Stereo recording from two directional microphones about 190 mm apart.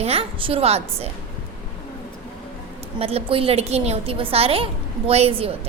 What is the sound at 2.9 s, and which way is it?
A woman's voice, 30° right (ahead or behind).